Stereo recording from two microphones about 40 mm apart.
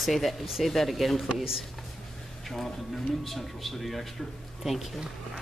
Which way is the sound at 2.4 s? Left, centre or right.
Centre.